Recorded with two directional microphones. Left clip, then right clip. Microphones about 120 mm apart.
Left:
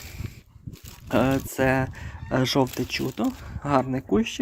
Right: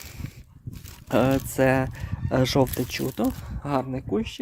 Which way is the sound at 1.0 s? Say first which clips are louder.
Right 1 dB; 45° right (ahead or behind).